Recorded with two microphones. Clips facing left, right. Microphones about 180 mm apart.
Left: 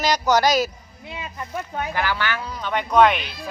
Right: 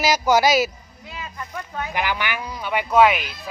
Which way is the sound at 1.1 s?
25° left (ahead or behind).